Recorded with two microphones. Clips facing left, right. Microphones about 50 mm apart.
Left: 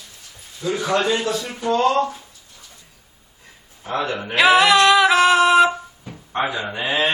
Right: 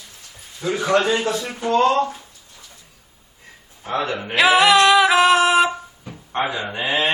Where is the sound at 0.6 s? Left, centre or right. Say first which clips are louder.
Even; right.